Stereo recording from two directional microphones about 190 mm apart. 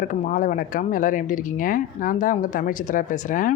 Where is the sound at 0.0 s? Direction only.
45° left (ahead or behind).